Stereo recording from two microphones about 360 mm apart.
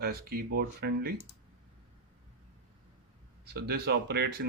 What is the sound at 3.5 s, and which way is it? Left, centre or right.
Speech, right.